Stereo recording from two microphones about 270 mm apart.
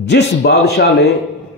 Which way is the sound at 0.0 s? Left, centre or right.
Left.